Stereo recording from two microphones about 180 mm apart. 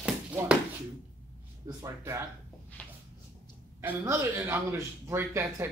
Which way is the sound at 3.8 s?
15° right (ahead or behind).